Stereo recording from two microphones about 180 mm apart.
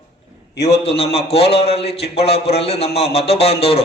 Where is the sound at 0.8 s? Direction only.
35° left (ahead or behind).